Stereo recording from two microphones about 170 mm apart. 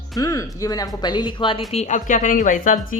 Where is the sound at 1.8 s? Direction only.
45° left (ahead or behind).